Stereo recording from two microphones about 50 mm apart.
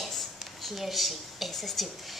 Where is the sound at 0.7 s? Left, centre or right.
Centre.